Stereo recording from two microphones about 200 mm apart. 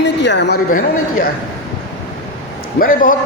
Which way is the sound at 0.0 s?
60° left (ahead or behind).